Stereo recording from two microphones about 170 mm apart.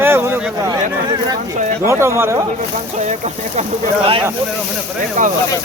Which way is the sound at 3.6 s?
35° right (ahead or behind).